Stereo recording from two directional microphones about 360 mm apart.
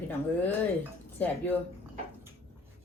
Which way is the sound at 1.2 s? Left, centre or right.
Centre.